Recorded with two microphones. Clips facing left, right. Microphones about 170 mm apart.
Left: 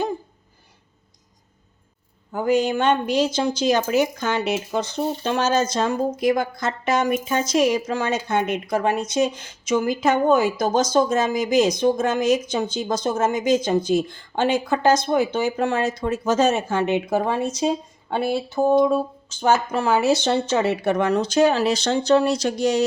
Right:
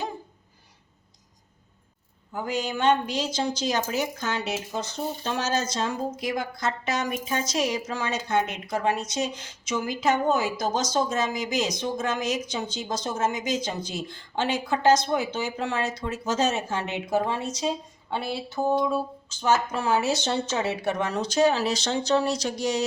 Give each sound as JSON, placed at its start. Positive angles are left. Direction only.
{"t": 2.3, "sound": "a woman's voice", "side_deg": 50}